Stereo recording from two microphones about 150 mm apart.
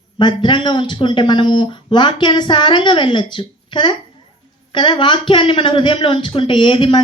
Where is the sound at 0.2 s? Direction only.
30° left (ahead or behind).